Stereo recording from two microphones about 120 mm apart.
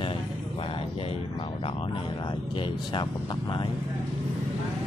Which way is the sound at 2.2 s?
45° left (ahead or behind).